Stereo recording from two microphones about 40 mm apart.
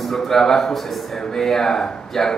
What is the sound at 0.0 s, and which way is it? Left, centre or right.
A man's voice, centre.